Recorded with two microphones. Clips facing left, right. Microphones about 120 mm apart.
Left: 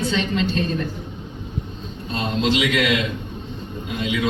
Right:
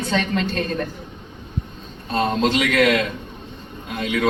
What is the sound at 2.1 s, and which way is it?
Speech, 50° right (ahead or behind).